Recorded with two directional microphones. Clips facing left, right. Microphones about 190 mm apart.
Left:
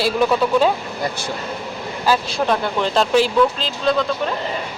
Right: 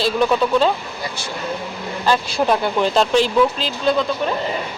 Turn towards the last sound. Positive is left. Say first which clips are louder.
# even
turn(degrees=-5)  # may be behind; listen again after turning